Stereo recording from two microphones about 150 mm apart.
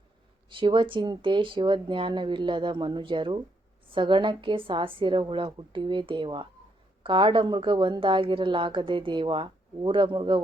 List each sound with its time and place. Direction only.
0.5 s a woman's voice: 35° right (ahead or behind)